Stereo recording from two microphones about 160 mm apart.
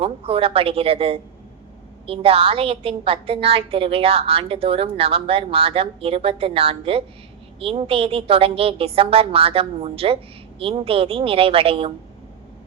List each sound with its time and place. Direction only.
0.0 s a woman's voice: 35° right (ahead or behind)